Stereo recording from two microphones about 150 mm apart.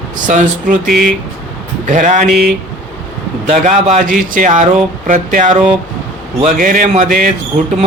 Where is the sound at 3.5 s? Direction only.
50° right (ahead or behind).